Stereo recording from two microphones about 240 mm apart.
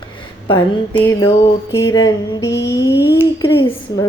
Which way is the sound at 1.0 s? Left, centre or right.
Centre.